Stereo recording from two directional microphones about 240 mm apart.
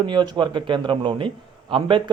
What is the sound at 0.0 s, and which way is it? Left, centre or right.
Speech, centre.